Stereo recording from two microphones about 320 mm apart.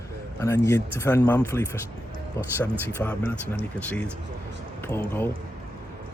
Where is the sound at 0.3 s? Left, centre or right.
Centre.